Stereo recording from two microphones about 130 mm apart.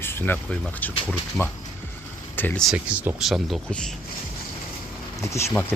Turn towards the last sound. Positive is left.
turn(degrees=20)  # may be behind; listen again after turning